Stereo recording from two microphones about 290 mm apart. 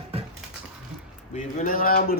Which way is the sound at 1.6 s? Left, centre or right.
Left.